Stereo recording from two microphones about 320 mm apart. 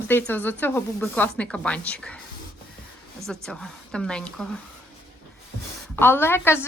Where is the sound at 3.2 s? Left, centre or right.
Centre.